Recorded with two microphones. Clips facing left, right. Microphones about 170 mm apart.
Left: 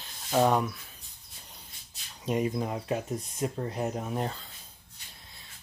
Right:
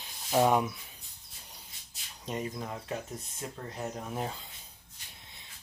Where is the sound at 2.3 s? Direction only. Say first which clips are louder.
Left 7 dB; 15° left (ahead or behind).